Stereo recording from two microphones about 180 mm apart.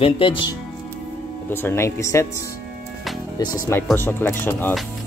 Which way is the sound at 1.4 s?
10° left (ahead or behind).